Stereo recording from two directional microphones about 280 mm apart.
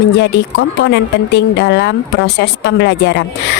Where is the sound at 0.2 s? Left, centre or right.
Left.